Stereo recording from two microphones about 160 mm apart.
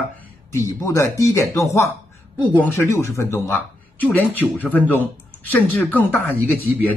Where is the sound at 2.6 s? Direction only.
15° left (ahead or behind).